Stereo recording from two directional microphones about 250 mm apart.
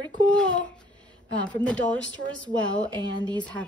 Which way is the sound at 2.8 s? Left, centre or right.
Centre.